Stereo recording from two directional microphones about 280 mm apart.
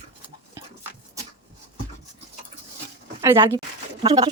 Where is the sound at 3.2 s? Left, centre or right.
Centre.